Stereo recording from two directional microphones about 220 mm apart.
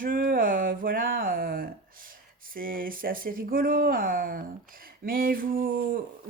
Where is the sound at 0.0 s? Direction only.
40° right (ahead or behind).